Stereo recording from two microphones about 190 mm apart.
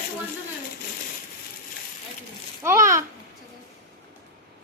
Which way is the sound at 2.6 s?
15° right (ahead or behind).